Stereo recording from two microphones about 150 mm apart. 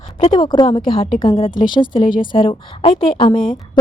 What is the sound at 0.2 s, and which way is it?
A woman's voice, 30° left (ahead or behind).